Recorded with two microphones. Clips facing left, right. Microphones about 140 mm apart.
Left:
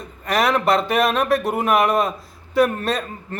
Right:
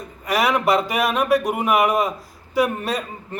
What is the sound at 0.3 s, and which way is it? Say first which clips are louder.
A man's voice: left 1 dB; 10° right (ahead or behind).